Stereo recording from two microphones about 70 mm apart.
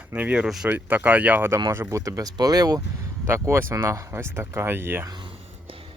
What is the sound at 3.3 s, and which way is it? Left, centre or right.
Speech, right.